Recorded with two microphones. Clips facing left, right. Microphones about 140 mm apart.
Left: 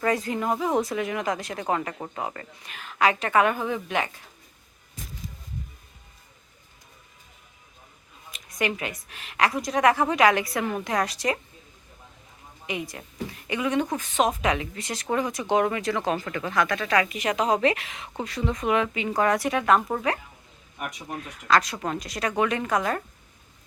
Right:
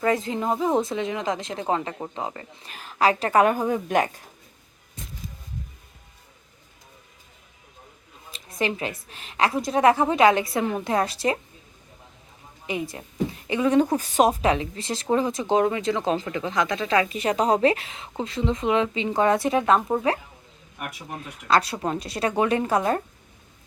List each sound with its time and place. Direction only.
0.0 s speech: 25° right (ahead or behind)
2.6 s a woman's voice: 35° right (ahead or behind)
8.3 s a woman's voice: 30° right (ahead or behind)
12.6 s a woman's voice: 30° right (ahead or behind)